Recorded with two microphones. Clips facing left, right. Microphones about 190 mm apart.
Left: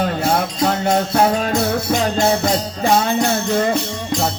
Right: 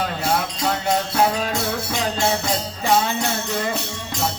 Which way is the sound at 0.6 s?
45° left (ahead or behind).